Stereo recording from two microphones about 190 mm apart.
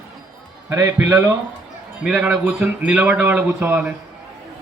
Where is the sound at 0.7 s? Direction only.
15° right (ahead or behind).